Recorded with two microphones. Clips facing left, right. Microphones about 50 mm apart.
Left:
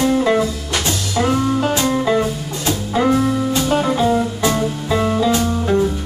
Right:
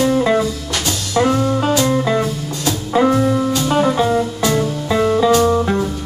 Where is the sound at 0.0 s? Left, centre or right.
Centre.